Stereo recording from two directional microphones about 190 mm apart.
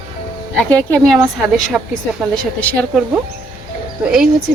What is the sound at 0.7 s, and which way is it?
A woman's voice, 5° left (ahead or behind).